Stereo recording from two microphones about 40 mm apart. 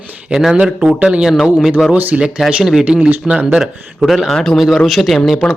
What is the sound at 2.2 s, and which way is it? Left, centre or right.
Speech, right.